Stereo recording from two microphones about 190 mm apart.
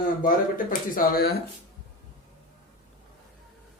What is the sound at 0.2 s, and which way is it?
Speech, 45° left (ahead or behind).